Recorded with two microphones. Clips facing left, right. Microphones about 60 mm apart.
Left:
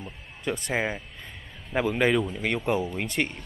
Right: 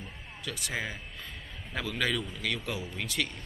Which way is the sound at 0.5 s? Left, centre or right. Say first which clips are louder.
Left 8 dB; left.